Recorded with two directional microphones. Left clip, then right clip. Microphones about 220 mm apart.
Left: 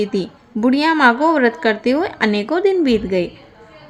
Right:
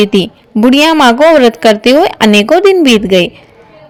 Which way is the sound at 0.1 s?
40° right (ahead or behind).